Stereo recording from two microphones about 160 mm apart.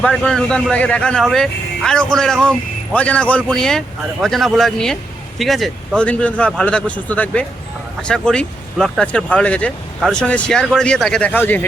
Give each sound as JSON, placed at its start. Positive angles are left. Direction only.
{"t": 0.0, "sound": "speech", "side_deg": 5}